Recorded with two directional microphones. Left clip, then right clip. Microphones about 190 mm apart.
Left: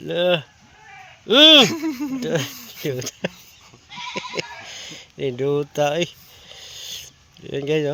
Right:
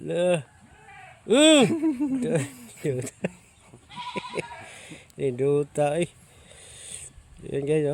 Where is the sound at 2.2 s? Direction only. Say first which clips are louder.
Left 3 dB; 10° right (ahead or behind).